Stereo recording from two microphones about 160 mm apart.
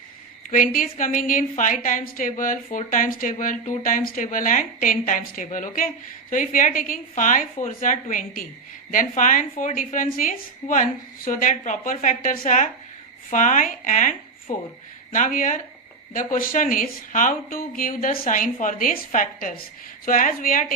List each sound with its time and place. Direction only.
0.5 s speech: 60° left (ahead or behind)